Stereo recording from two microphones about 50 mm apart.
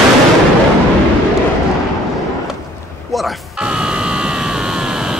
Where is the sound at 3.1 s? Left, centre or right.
Centre.